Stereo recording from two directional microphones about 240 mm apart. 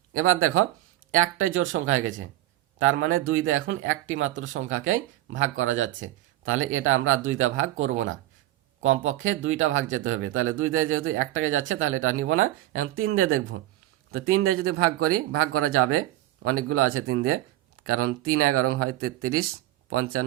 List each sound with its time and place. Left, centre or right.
0.1 s speech: right